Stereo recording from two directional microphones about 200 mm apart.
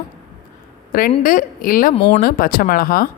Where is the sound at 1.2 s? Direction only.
45° left (ahead or behind).